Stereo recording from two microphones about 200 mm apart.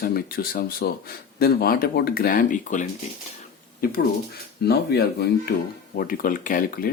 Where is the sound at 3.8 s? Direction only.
45° left (ahead or behind).